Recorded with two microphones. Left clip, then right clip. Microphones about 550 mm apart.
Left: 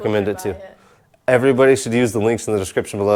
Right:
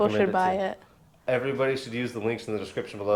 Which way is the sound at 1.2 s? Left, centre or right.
Left.